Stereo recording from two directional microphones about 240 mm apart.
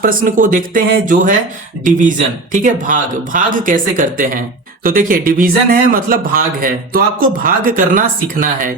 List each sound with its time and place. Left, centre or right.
0.0 s speech: right